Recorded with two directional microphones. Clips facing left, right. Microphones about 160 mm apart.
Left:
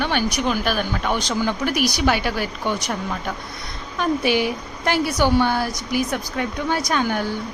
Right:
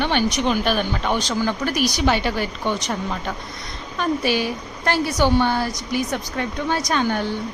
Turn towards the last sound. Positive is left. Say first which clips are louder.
# even
turn(degrees=10)  # may be behind; listen again after turning